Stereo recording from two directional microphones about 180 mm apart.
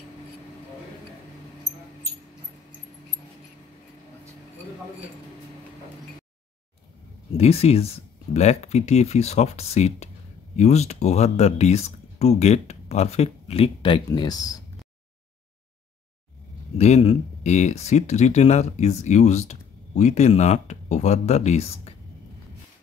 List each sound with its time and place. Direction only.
7.3 s speech: 35° left (ahead or behind)
16.7 s speech: 35° left (ahead or behind)